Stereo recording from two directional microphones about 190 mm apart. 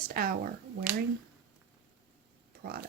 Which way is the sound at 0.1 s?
50° right (ahead or behind).